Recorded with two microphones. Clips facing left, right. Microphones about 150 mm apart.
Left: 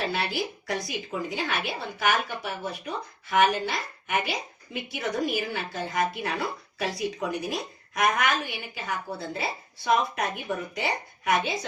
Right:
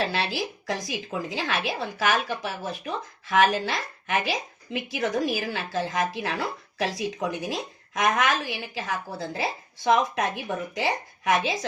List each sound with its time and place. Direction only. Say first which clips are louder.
0.0 s a woman's voice: right 1 dB; 90° right